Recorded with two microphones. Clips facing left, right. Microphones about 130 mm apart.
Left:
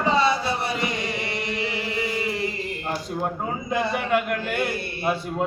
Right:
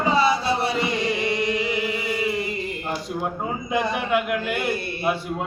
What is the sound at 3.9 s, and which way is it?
Speech, 5° right (ahead or behind).